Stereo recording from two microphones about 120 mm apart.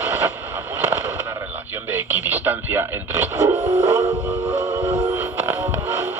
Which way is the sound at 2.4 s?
15° right (ahead or behind).